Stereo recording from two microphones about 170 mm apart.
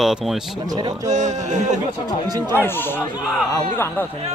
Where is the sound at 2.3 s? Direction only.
25° right (ahead or behind).